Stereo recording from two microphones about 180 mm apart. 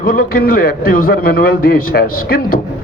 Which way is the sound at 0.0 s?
55° left (ahead or behind).